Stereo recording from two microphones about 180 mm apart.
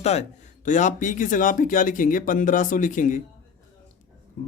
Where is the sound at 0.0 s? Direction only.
40° left (ahead or behind).